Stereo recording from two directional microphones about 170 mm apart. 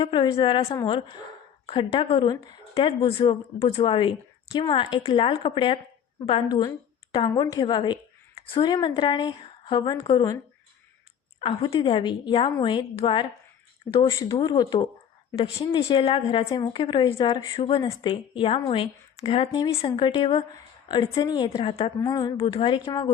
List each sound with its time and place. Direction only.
0.0 s speech: 30° left (ahead or behind)
0.6 s a woman's voice: 20° left (ahead or behind)
11.3 s speech: 30° left (ahead or behind)
14.0 s speech: 20° left (ahead or behind)
15.4 s speech: 35° left (ahead or behind)
22.0 s speech: 20° left (ahead or behind)